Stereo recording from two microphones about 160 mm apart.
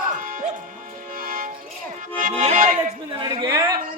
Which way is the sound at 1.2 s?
60° right (ahead or behind).